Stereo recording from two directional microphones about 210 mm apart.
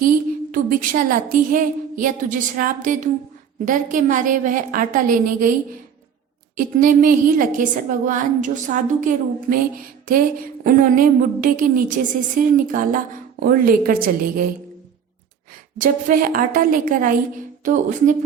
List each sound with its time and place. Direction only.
0.5 s a woman's voice: 40° right (ahead or behind)
6.6 s a woman's voice: 40° right (ahead or behind)
15.8 s a woman's voice: 40° right (ahead or behind)